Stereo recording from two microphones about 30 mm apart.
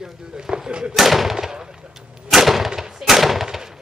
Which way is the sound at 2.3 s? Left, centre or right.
Centre.